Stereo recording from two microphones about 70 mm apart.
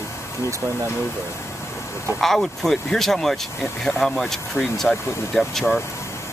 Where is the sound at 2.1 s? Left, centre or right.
Centre.